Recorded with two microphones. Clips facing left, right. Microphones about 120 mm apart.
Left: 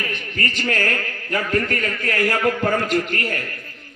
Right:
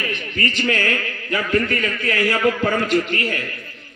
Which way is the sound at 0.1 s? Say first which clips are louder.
Right 2 dB; 45° left (ahead or behind).